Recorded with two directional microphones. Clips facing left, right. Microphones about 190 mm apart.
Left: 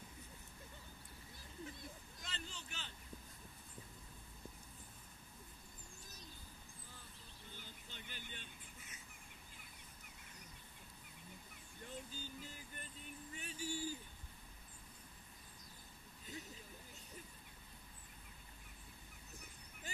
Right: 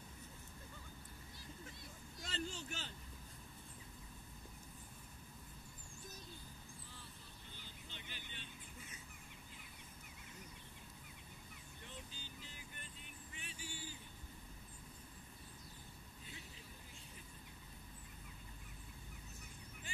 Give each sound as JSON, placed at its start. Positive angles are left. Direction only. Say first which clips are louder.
{"t": 2.2, "sound": "a sound", "louder": "right 8 dB", "side_deg": -50}
{"t": 7.5, "sound": "vehicle", "louder": "left 1 dB", "side_deg": 50}
{"t": 11.8, "sound": "vehicle", "louder": "left 6 dB", "side_deg": 45}